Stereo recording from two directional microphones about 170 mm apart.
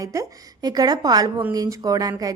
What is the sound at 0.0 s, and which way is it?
A woman's voice, 20° right (ahead or behind).